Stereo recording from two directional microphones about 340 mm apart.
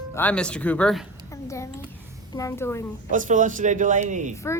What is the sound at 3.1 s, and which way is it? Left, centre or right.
A man's voice, right.